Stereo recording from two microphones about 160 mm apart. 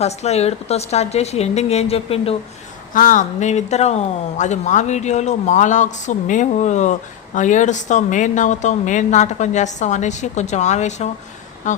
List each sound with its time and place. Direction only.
0.0 s a woman's voice: 40° left (ahead or behind)
2.9 s speech: 55° left (ahead or behind)